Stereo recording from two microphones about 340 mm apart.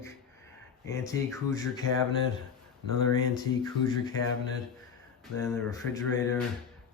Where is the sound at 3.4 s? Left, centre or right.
Centre.